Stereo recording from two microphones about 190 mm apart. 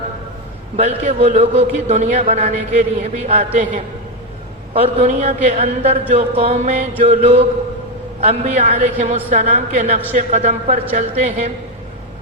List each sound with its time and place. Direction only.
0.8 s a man's voice: 40° right (ahead or behind)
4.7 s a man's voice: 35° right (ahead or behind)